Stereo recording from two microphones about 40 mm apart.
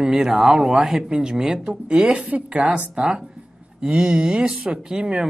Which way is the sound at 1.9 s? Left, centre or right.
Right.